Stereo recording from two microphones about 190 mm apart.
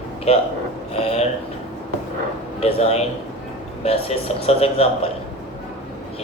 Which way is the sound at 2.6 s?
35° left (ahead or behind).